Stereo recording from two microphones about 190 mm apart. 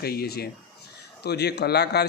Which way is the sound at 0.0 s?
55° left (ahead or behind).